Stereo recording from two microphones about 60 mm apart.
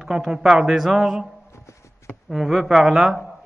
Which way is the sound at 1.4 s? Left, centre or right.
Left.